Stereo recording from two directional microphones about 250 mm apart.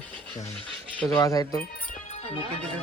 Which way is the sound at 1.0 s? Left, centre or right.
Centre.